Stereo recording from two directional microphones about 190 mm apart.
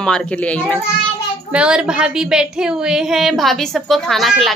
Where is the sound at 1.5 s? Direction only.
5° right (ahead or behind).